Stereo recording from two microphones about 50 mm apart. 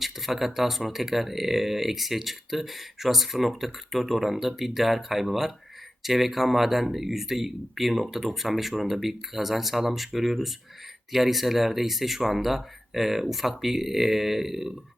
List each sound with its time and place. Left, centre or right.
0.0 s speech: centre